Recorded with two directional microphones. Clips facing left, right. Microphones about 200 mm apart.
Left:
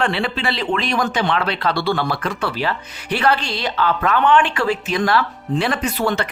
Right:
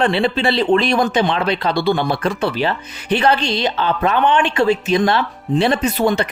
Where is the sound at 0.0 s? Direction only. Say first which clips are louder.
Right 5 dB; 25° right (ahead or behind).